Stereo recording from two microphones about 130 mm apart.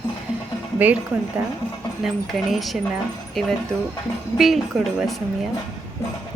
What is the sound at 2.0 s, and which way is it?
Speech, centre (ahead or behind).